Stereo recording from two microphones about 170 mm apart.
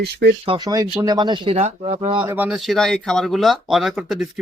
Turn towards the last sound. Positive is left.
turn(degrees=0)  # may be behind; listen again after turning